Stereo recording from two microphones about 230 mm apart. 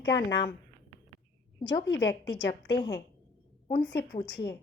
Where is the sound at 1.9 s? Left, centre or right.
Left.